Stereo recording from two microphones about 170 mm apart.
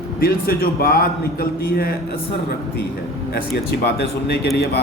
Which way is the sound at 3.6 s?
70° left (ahead or behind).